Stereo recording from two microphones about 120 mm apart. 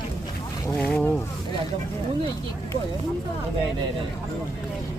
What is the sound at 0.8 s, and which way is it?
Speech, 15° left (ahead or behind).